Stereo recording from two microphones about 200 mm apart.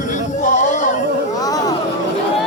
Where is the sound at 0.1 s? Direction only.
40° left (ahead or behind).